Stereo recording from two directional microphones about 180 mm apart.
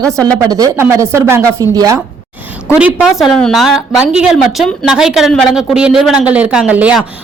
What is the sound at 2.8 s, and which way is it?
A woman's voice, 5° right (ahead or behind).